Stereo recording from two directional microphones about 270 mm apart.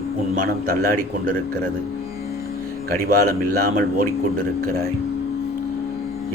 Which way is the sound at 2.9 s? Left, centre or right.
Right.